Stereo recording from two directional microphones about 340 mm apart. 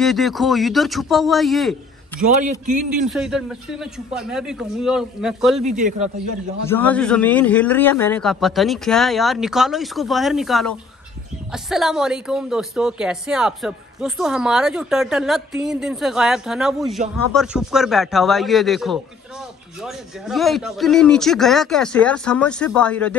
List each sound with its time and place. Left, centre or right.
0.0 s a woman's voice: centre
2.6 s a man's voice: right
3.1 s a woman's voice: centre
5.6 s a man's voice: right
6.7 s a woman's voice: centre